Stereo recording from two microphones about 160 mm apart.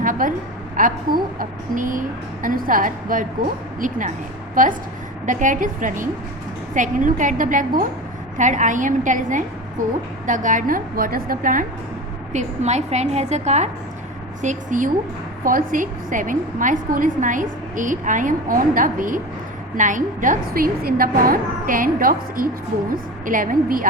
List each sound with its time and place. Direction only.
0.0 s a sound: 55° right (ahead or behind)
0.8 s a woman's voice: 60° right (ahead or behind)
12.3 s a woman's voice: 45° right (ahead or behind)
14.4 s a woman's voice: 55° right (ahead or behind)